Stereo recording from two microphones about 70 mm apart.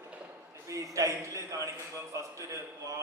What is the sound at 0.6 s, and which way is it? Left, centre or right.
A man's voice, right.